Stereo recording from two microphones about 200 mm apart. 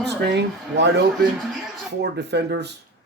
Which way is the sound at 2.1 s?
55° right (ahead or behind).